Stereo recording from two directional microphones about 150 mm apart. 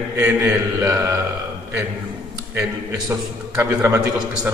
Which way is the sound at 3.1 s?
15° right (ahead or behind).